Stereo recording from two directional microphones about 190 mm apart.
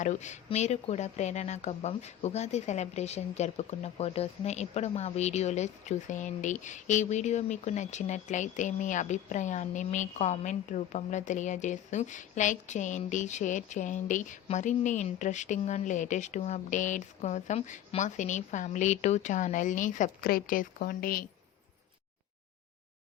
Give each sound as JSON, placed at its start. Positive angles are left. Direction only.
{"t": 0.0, "sound": "speech", "side_deg": 40}